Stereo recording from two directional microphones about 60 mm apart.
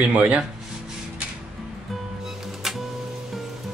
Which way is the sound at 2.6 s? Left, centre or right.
Centre.